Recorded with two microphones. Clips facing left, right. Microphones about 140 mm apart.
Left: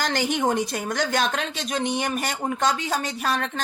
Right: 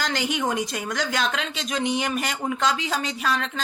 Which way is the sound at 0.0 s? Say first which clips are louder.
Left 2 dB; 50° left (ahead or behind).